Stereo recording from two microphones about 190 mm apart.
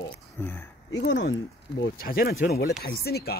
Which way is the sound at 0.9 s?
65° left (ahead or behind).